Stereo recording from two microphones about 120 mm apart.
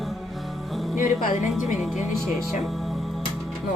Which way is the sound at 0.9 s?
90° left.